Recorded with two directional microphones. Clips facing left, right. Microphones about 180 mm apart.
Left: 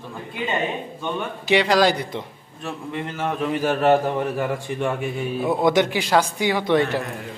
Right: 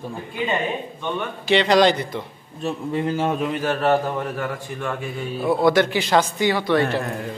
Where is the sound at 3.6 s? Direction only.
15° left (ahead or behind).